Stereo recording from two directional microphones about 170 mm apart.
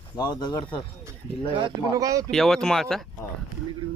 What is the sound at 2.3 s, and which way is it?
Speech, 5° left (ahead or behind).